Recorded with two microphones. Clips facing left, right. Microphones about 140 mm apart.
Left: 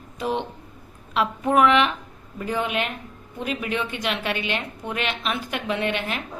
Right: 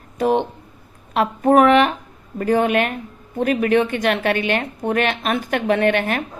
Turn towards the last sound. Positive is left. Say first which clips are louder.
# right 8 dB
turn(degrees=-55)  # may be behind; listen again after turning